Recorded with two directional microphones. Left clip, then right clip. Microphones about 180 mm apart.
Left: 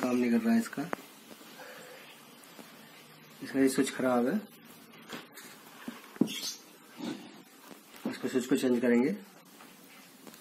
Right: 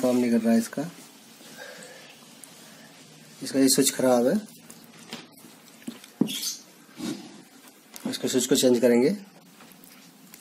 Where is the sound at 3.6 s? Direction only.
75° right (ahead or behind).